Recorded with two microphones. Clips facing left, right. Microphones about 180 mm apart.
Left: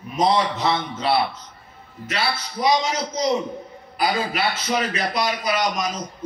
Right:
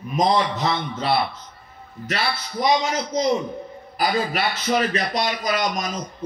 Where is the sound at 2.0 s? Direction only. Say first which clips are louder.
Even; 40° right (ahead or behind).